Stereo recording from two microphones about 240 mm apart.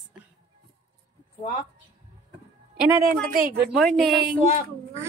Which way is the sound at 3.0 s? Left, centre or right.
Right.